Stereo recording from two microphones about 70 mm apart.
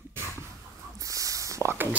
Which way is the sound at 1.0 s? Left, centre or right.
Right.